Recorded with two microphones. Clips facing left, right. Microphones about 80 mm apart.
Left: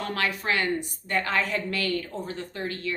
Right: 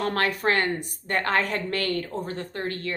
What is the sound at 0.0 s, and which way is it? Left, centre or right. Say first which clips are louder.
A woman's voice: right 4 dB; right.